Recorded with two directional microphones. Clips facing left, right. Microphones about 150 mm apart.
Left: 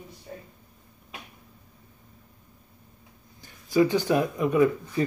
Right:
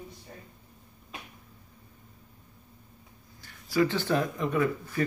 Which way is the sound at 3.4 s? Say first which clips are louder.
Left 4 dB; 20° left (ahead or behind).